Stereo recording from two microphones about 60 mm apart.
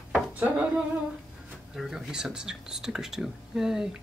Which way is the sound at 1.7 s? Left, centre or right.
Centre.